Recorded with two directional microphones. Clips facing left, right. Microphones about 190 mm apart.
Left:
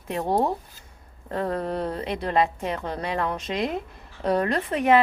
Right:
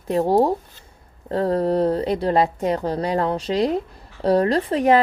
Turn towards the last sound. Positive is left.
turn(degrees=-35)  # may be behind; listen again after turning